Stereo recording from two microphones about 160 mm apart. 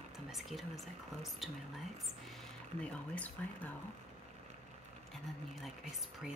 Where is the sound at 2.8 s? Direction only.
10° left (ahead or behind).